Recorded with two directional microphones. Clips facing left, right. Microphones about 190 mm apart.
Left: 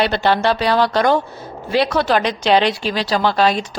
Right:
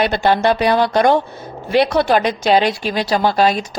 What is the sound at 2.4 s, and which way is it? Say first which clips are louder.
Speech: left 1 dB; 45° right (ahead or behind).